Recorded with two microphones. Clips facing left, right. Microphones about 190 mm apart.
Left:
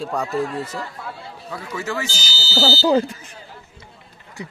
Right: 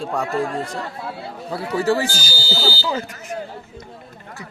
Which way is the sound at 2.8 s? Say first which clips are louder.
Left 8 dB; 35° left (ahead or behind).